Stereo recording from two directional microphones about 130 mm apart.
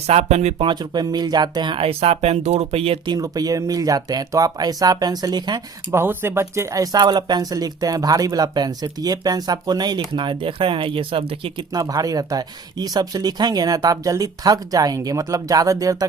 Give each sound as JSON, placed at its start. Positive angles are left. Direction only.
{"t": 0.1, "sound": "speech", "side_deg": -55}
{"t": 0.6, "sound": "speech", "side_deg": -35}
{"t": 3.1, "sound": "speech", "side_deg": -30}
{"t": 5.9, "sound": "speech", "side_deg": -20}
{"t": 11.7, "sound": "speech", "side_deg": -30}